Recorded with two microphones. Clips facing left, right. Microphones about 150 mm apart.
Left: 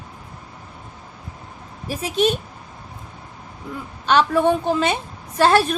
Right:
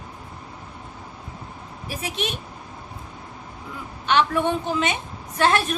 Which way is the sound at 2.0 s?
35° left (ahead or behind).